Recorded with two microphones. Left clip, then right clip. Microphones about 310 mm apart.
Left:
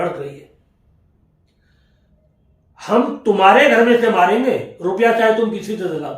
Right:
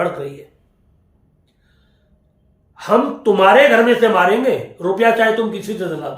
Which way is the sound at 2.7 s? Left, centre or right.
Centre.